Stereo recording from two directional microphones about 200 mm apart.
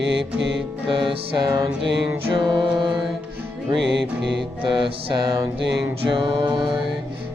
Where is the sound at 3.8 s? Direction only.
60° right (ahead or behind).